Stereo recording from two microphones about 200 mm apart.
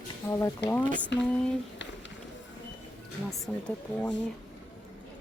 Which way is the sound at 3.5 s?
Centre (ahead or behind).